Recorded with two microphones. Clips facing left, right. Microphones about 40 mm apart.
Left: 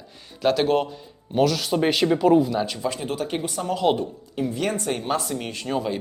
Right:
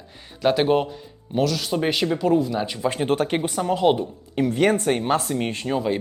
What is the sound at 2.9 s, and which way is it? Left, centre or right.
Speech, right.